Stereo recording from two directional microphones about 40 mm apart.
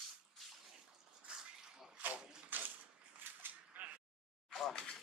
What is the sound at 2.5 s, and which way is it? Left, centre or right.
Bathtub, right.